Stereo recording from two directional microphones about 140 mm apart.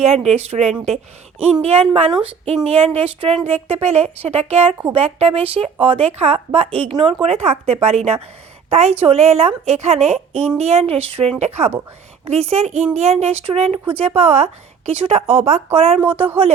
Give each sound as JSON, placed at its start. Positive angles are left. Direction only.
{"t": 0.0, "sound": "a woman's voice", "side_deg": -50}